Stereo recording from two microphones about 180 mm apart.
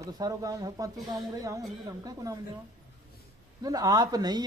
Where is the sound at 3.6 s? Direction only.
20° right (ahead or behind).